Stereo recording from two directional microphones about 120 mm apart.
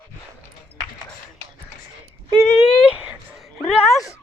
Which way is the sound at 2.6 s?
5° right (ahead or behind).